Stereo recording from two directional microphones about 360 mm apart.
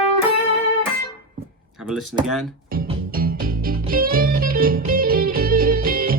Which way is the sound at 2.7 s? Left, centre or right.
Right.